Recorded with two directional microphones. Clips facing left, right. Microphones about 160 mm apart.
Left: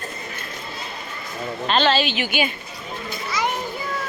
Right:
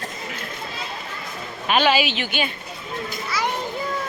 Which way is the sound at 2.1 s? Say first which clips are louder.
Left 2 dB; 5° left (ahead or behind).